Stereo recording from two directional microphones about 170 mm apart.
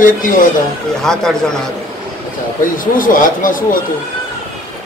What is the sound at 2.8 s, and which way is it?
Speech, 50° left (ahead or behind).